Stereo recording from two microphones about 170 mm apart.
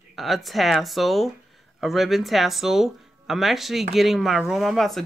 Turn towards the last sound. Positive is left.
turn(degrees=0)  # may be behind; listen again after turning